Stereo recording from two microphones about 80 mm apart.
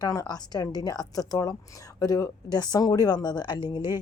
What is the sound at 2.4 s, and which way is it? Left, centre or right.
Speech, left.